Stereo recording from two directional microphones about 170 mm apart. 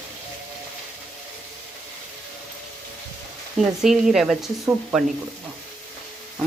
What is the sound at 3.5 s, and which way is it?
Speech, centre (ahead or behind).